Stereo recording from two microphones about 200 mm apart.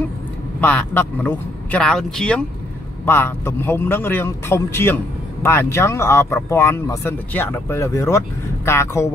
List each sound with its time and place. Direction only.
0.6 s a man's voice: 10° left (ahead or behind)